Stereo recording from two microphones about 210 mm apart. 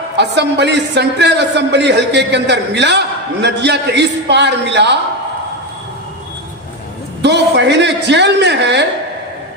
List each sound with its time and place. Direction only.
0.2 s speech: 55° right (ahead or behind)
7.2 s a man's voice: 55° right (ahead or behind)